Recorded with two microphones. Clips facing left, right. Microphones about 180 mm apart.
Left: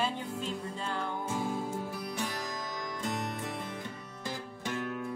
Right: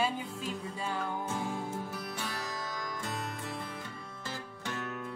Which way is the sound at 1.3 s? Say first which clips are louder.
Left 2 dB; 15° left (ahead or behind).